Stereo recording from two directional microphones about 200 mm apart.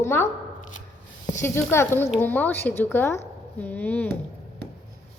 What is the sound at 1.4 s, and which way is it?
A woman's voice, 15° left (ahead or behind).